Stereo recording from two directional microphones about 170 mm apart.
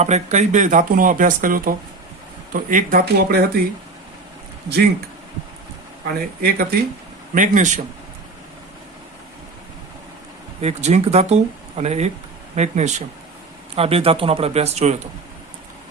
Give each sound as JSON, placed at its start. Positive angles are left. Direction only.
{"t": 0.0, "sound": "speech", "side_deg": -40}
{"t": 6.1, "sound": "speech", "side_deg": -60}
{"t": 7.3, "sound": "speech", "side_deg": -50}
{"t": 10.6, "sound": "speech", "side_deg": -40}